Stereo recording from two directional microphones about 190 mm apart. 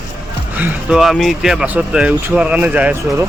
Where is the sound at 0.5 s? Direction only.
5° right (ahead or behind).